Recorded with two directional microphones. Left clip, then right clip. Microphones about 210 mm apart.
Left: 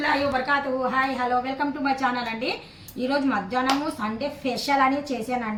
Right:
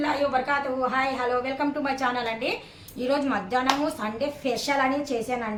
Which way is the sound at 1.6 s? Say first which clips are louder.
Left 2 dB; 15° right (ahead or behind).